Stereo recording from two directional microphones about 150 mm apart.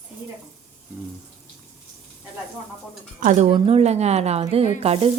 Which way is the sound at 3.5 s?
40° right (ahead or behind).